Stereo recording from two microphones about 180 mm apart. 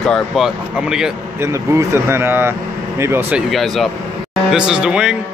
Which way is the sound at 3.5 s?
Centre (ahead or behind).